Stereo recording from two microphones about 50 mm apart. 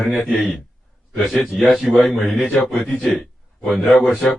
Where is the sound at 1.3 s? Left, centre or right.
Centre.